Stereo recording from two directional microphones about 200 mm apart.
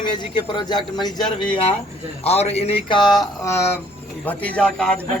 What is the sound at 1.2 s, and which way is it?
Speech, 5° left (ahead or behind).